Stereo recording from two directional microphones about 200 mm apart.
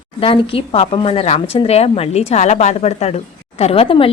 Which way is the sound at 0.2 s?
30° left (ahead or behind).